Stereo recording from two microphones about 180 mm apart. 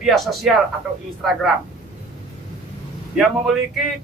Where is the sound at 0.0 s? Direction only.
Centre (ahead or behind).